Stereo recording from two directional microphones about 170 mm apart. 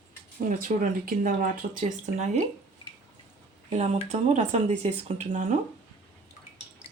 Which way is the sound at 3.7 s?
40° right (ahead or behind).